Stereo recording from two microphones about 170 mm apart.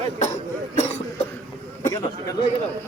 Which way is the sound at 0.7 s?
40° left (ahead or behind).